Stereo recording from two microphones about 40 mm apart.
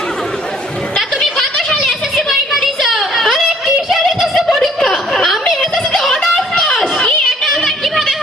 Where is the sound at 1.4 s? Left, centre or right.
Centre.